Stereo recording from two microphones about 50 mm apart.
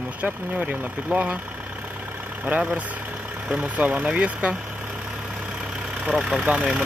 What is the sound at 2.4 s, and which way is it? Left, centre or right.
Speech, right.